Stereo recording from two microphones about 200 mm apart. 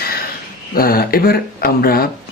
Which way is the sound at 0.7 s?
50° left (ahead or behind).